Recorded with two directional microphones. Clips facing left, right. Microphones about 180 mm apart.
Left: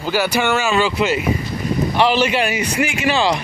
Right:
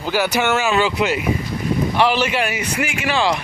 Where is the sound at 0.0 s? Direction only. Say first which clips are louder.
Left 1 dB; 10° left (ahead or behind).